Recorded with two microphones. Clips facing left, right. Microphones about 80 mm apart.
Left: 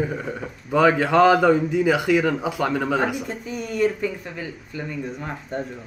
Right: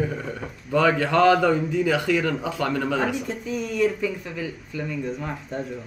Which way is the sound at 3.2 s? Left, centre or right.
Centre.